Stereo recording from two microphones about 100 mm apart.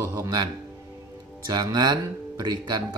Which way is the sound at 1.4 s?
45° right (ahead or behind).